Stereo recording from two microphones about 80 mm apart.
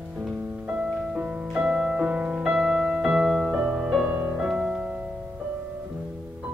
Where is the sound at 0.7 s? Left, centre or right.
Centre.